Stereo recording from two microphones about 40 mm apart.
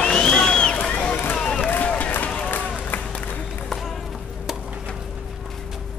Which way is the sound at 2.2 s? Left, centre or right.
Left.